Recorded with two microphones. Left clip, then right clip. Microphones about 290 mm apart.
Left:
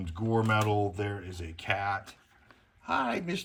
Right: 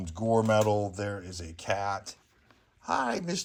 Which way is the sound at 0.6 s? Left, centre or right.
Right.